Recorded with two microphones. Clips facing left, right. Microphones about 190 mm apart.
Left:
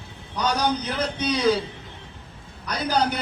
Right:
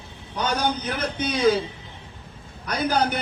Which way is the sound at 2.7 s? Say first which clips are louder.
Right 1 dB; 50° right (ahead or behind).